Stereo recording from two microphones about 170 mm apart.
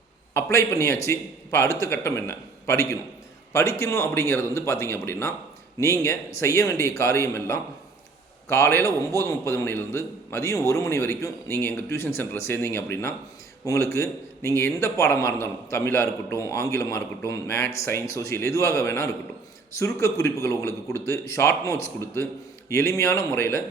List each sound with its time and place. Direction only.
0.3 s a man's voice: 15° left (ahead or behind)